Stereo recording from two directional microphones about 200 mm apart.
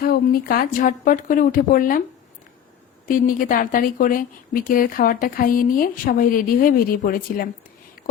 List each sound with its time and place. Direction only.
0.0 s speech: 50° left (ahead or behind)
3.1 s speech: 45° left (ahead or behind)